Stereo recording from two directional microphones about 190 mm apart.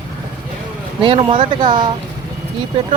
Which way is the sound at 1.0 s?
25° right (ahead or behind).